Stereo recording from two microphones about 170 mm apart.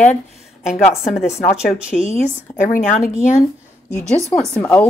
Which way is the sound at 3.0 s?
15° left (ahead or behind).